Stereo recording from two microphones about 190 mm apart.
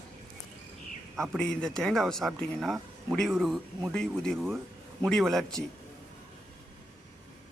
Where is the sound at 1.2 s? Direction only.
5° left (ahead or behind).